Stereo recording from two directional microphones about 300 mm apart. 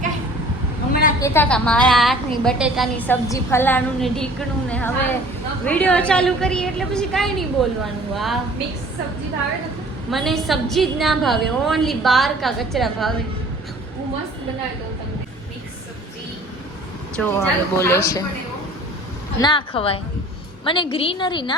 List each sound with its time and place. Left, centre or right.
1.2 s a woman's voice: centre
10.1 s a woman's voice: centre
17.2 s speech: centre
19.4 s speech: centre